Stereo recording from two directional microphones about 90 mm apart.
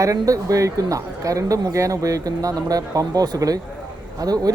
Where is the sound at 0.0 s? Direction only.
40° right (ahead or behind).